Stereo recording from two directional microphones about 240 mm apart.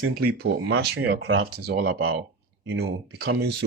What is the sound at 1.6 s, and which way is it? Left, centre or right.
Speech, right.